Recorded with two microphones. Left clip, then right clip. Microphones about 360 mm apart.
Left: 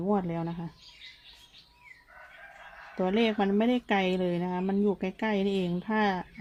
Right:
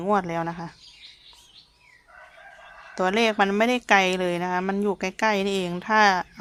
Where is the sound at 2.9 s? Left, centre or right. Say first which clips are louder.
Right 6 dB; right.